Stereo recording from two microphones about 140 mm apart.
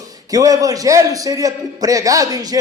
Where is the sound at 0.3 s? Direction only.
25° right (ahead or behind).